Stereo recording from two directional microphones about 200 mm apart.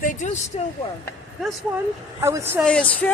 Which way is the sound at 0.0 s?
40° left (ahead or behind).